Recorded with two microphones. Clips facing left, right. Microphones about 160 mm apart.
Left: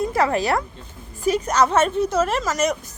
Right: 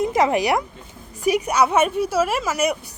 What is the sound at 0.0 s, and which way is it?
A woman's voice, 15° right (ahead or behind).